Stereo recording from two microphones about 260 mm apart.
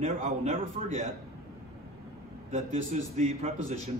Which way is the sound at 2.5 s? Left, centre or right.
Right.